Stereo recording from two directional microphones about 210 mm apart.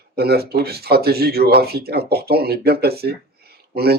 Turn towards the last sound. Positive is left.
turn(degrees=-50)  # may be behind; listen again after turning